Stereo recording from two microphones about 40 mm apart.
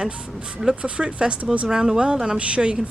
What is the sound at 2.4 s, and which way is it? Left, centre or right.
Speech, right.